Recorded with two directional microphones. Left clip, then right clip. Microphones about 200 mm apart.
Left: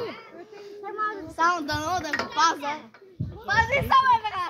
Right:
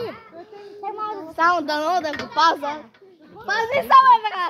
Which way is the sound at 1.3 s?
25° left (ahead or behind).